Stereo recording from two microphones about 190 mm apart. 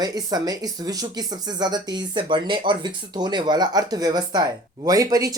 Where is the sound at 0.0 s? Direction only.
20° right (ahead or behind).